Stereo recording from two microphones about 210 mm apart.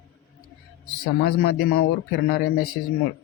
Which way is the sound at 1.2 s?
50° left (ahead or behind).